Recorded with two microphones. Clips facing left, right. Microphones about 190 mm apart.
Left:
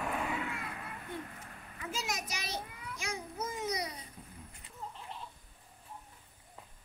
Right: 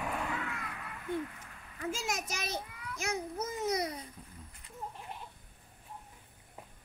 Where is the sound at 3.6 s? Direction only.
50° right (ahead or behind).